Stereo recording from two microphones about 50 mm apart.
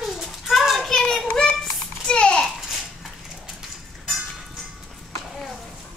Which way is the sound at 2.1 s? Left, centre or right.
Centre.